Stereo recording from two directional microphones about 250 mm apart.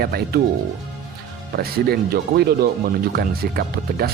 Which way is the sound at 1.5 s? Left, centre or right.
Right.